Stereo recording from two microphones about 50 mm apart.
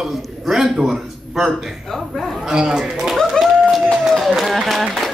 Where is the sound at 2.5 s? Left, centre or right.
Centre.